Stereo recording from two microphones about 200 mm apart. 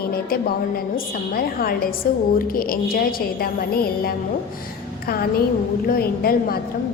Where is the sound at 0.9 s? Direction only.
50° left (ahead or behind).